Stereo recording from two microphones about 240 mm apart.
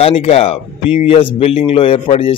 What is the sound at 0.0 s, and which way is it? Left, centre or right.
Speech, left.